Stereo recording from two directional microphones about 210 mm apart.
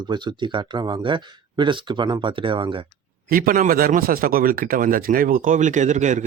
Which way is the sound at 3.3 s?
40° right (ahead or behind).